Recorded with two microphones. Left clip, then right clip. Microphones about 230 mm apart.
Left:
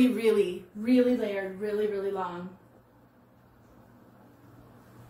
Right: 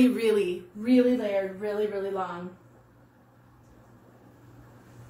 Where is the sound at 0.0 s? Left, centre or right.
Centre.